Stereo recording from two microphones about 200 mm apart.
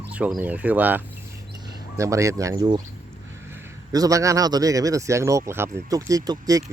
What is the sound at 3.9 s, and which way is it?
Speech, 15° right (ahead or behind).